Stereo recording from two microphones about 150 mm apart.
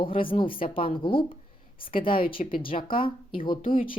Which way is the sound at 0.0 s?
35° left (ahead or behind).